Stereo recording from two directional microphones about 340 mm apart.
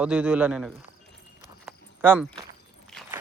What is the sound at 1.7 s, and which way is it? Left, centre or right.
Walk, centre.